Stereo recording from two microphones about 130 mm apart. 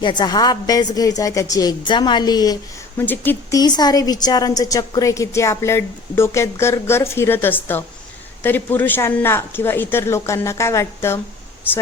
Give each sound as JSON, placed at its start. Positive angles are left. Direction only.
{"t": 0.0, "sound": "a woman's voice", "side_deg": 35}
{"t": 3.0, "sound": "speech", "side_deg": 15}
{"t": 3.6, "sound": "a woman's voice", "side_deg": 30}